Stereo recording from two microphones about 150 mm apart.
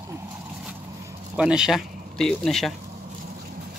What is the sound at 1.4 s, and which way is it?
Speech, 5° right (ahead or behind).